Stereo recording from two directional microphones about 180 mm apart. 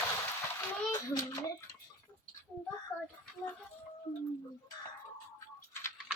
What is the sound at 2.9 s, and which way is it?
Child singing, 5° left (ahead or behind).